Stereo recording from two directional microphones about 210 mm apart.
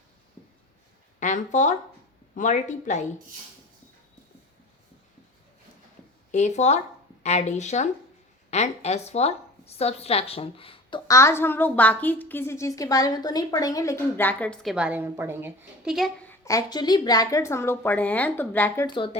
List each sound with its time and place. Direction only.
1.2 s speech: 35° left (ahead or behind)
6.3 s a woman's voice: 35° left (ahead or behind)
11.1 s a woman's voice: 15° left (ahead or behind)
18.9 s speech: 25° left (ahead or behind)